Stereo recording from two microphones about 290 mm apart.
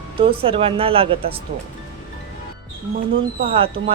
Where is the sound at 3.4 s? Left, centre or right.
Centre.